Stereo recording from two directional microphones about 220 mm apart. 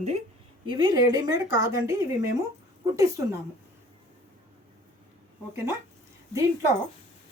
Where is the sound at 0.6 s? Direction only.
20° right (ahead or behind).